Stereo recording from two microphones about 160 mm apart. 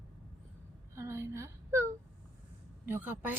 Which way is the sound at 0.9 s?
20° right (ahead or behind).